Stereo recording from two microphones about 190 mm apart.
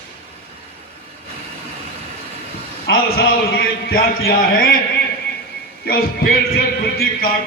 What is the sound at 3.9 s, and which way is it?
Speech, 50° left (ahead or behind).